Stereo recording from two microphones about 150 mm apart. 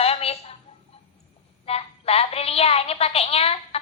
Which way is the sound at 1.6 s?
40° left (ahead or behind).